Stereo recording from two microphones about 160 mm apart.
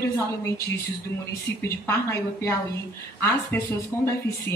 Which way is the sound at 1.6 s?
15° left (ahead or behind).